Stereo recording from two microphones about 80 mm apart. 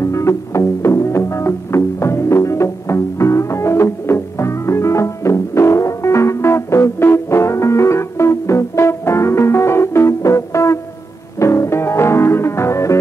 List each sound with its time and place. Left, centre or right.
0.0 s music: left